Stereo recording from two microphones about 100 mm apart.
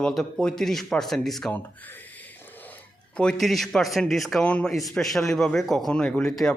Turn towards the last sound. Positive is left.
turn(degrees=5)  # may be behind; listen again after turning